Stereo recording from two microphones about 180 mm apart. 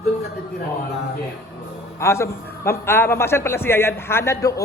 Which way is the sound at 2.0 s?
15° left (ahead or behind).